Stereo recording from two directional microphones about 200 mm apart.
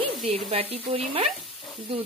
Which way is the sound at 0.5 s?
30° right (ahead or behind).